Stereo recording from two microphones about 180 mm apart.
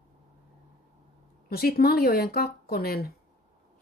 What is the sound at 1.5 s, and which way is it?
Speech, 55° left (ahead or behind).